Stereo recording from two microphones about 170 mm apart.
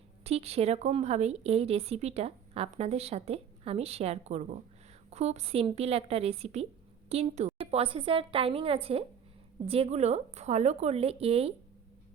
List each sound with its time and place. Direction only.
0.3 s speech: 35° right (ahead or behind)